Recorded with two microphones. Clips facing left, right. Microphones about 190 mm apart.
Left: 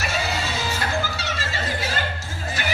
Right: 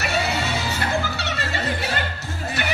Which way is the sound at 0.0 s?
65° right (ahead or behind).